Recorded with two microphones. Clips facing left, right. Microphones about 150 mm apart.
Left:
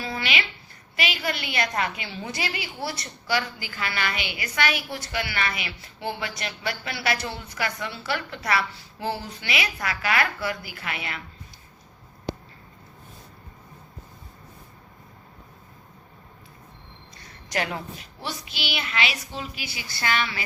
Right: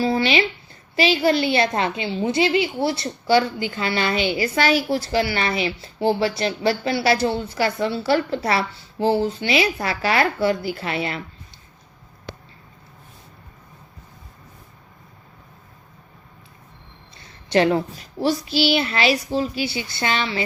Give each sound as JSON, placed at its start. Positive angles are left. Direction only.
{"t": 0.0, "sound": "a woman's voice", "side_deg": -30}
{"t": 17.2, "sound": "a child's voice", "side_deg": -25}